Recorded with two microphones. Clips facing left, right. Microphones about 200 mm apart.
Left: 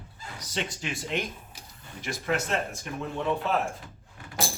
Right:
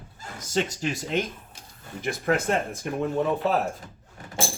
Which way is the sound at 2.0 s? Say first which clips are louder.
Right 5 dB; 55° right (ahead or behind).